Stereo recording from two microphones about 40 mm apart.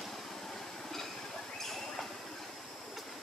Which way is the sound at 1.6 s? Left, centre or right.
Centre.